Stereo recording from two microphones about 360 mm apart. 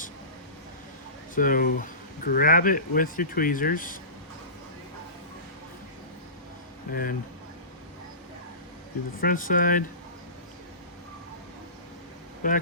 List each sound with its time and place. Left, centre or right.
1.4 s speech: left
6.9 s speech: left
9.2 s speech: left
12.4 s speech: left